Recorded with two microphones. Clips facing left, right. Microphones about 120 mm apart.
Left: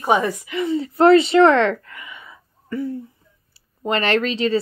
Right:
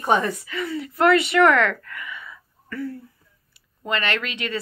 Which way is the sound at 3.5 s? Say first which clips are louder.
Left 5 dB; 35° left (ahead or behind).